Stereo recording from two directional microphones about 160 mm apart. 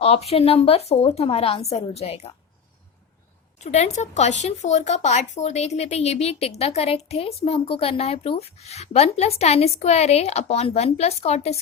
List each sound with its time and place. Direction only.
0.0 s speech: 40° left (ahead or behind)
3.6 s speech: 45° left (ahead or behind)